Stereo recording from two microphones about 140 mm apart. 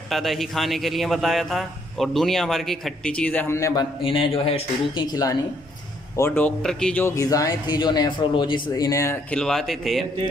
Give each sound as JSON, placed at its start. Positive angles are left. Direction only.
{"t": 0.1, "sound": "a man's voice", "side_deg": 0}
{"t": 4.0, "sound": "a man's voice", "side_deg": 40}
{"t": 6.1, "sound": "a man's voice", "side_deg": 15}
{"t": 6.6, "sound": "speech", "side_deg": 5}
{"t": 9.3, "sound": "a man's voice", "side_deg": 5}